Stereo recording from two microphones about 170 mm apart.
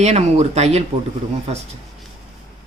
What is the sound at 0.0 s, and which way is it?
Speech, 40° right (ahead or behind).